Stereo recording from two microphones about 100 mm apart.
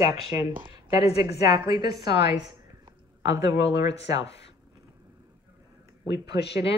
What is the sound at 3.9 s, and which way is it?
Speech, 90° left.